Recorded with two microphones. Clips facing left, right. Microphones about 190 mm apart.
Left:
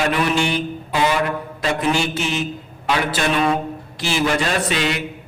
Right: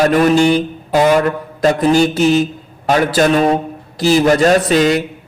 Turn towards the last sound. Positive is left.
turn(degrees=-40)  # may be behind; listen again after turning